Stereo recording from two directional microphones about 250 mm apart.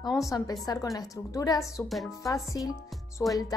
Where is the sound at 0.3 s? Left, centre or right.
Centre.